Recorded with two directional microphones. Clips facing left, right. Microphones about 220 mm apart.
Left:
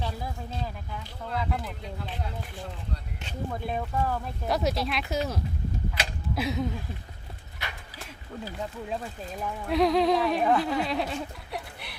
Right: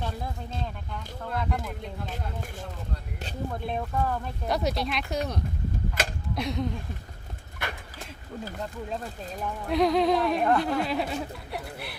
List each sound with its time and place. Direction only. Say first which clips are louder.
0.0 s speech: even; centre (ahead or behind)
2.0 s speech: even; 45° right (ahead or behind)
3.5 s speech: left 1 dB; centre (ahead or behind)
7.6 s horse: right 5 dB; 50° right (ahead or behind)
9.4 s speech: even; centre (ahead or behind)